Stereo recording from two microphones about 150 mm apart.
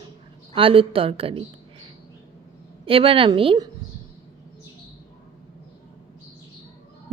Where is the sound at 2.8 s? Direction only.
40° right (ahead or behind).